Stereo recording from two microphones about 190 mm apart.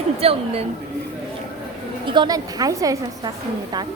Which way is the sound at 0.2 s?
30° right (ahead or behind).